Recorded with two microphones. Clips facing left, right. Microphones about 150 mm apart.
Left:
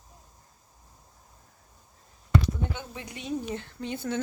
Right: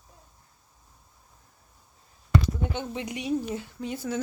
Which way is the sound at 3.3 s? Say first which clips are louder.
Right 2 dB; 5° right (ahead or behind).